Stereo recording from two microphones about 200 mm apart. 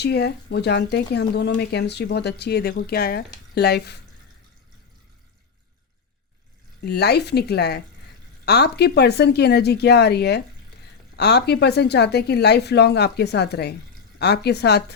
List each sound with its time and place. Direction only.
0.0 s speech: 55° left (ahead or behind)
6.8 s speech: 55° left (ahead or behind)